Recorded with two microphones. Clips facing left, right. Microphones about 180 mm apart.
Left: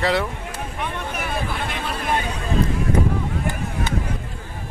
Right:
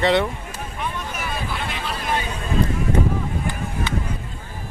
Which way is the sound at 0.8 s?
55° left (ahead or behind).